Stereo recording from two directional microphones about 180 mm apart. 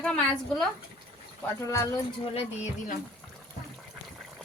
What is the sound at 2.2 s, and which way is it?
Speech, 35° left (ahead or behind).